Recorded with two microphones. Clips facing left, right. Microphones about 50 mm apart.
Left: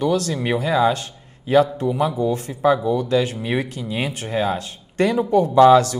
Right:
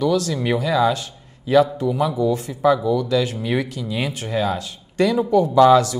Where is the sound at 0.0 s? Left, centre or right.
Left.